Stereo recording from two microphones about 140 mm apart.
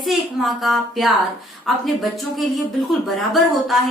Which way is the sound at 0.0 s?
Centre (ahead or behind).